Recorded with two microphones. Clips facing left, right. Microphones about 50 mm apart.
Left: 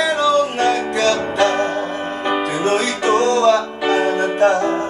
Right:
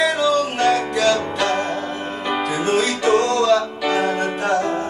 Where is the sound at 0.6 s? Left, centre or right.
Left.